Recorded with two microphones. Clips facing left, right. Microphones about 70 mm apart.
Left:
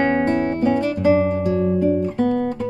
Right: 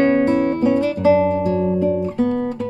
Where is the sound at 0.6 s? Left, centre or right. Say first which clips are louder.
Right 2 dB; left.